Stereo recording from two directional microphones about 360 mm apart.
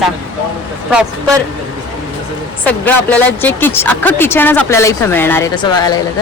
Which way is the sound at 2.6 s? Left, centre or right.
Centre.